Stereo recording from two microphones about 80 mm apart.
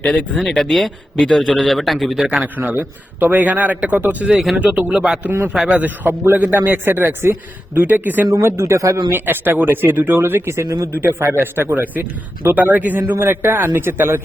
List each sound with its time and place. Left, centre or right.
0.3 s a man's voice: centre
2.2 s a man's voice: centre
5.2 s a man's voice: right
5.5 s a man's voice: centre
8.4 s speech: right
9.0 s a man's voice: right